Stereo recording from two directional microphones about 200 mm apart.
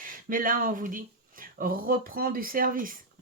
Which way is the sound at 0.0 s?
45° right (ahead or behind).